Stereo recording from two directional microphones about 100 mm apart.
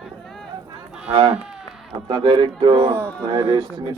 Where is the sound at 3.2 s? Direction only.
25° right (ahead or behind).